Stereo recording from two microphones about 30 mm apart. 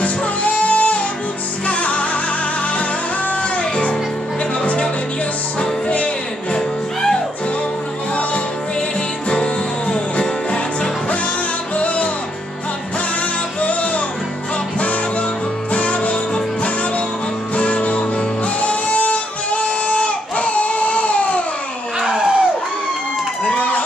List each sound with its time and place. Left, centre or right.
0.0 s music: left
5.6 s music: left
6.5 s music: centre
9.9 s music: left
11.7 s music: left
13.6 s music: left
17.6 s music: left
22.0 s a sound: right